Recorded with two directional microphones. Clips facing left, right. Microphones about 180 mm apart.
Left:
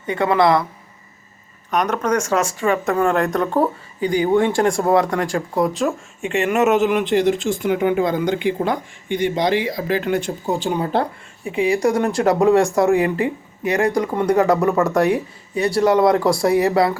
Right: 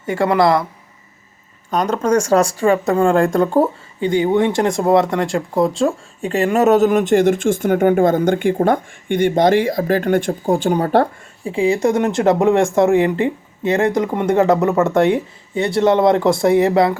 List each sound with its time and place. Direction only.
0.0 s speech: 40° right (ahead or behind)
1.7 s speech: 30° right (ahead or behind); by 11.1 s 50° right (ahead or behind)
11.4 s speech: 25° right (ahead or behind)